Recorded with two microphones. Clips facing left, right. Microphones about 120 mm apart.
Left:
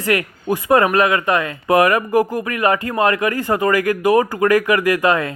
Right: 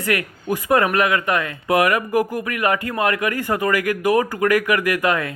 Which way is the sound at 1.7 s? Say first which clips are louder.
Left 3 dB; 40° left (ahead or behind).